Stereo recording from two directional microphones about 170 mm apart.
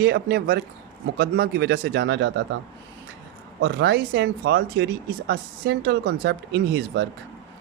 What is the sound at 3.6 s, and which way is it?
Speech, 85° right.